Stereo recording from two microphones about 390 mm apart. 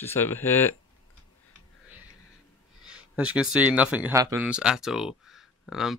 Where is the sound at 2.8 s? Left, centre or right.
Centre.